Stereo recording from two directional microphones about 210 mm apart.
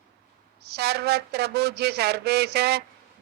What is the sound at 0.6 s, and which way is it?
Speech, 50° right (ahead or behind).